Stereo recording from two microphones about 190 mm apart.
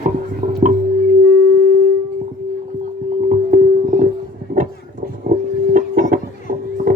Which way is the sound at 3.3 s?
40° right (ahead or behind).